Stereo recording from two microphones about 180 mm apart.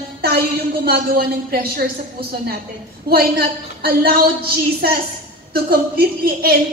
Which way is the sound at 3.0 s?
55° right (ahead or behind).